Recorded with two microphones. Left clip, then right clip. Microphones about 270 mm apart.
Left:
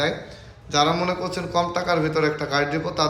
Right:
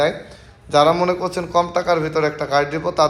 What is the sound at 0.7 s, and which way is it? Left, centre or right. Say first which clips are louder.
A man's voice: right 6 dB; centre.